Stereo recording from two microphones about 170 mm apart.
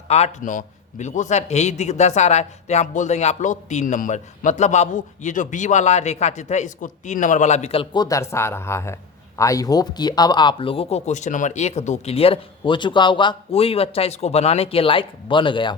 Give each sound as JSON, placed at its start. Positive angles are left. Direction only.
{"t": 0.1, "sound": "a man's voice", "side_deg": 40}
{"t": 8.0, "sound": "speech", "side_deg": 15}